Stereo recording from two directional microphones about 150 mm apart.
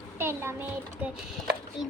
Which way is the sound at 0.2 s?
15° right (ahead or behind).